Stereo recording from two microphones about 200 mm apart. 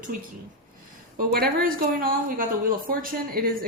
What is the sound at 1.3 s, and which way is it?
A woman's voice, 45° right (ahead or behind).